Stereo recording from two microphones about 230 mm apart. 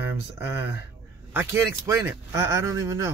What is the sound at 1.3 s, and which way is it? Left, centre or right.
Speech, centre.